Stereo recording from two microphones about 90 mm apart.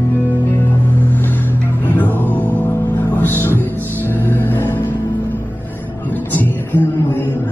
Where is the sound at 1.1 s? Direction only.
20° left (ahead or behind).